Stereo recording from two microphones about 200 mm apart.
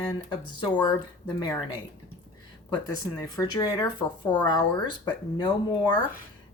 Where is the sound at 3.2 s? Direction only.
15° left (ahead or behind).